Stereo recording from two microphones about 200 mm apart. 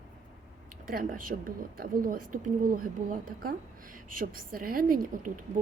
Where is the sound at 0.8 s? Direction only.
45° right (ahead or behind).